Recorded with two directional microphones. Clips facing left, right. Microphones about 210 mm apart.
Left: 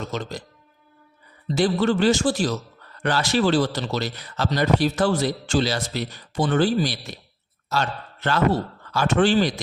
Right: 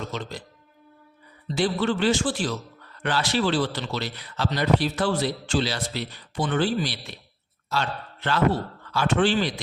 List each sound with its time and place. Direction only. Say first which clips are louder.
0.1 s speech: left 3 dB; 45° left (ahead or behind)
1.5 s a man's voice: left 4 dB; 45° left (ahead or behind)